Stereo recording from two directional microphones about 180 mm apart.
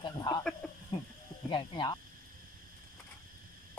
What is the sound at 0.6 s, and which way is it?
Speech, centre (ahead or behind).